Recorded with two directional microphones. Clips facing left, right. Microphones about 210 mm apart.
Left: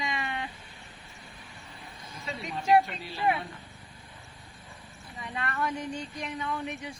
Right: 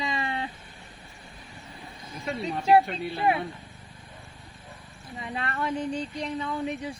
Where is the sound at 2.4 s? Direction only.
30° right (ahead or behind).